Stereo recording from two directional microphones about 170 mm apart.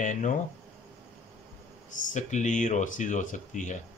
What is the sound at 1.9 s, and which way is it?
A man's voice, 50° left (ahead or behind).